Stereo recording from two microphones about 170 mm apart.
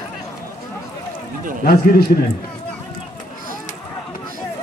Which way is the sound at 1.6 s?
60° left (ahead or behind).